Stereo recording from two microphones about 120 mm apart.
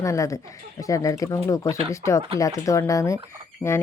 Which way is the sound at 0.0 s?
25° left (ahead or behind).